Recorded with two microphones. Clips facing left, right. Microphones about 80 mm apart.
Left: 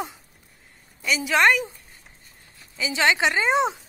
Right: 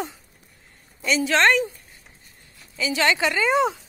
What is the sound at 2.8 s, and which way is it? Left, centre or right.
A woman's voice, centre.